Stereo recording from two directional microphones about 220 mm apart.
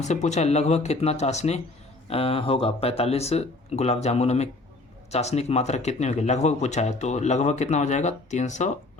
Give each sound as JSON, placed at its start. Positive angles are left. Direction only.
{"t": 0.0, "sound": "speech", "side_deg": 30}